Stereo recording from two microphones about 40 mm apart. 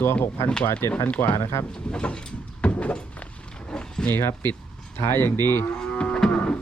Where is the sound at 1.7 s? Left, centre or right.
Left.